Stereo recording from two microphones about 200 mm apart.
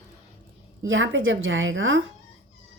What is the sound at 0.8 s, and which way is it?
A woman's voice, 75° right (ahead or behind).